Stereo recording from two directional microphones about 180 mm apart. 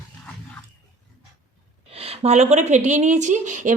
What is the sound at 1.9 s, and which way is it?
A woman's voice, 35° right (ahead or behind).